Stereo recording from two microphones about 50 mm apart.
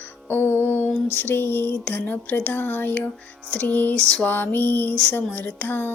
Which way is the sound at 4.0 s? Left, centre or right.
Centre.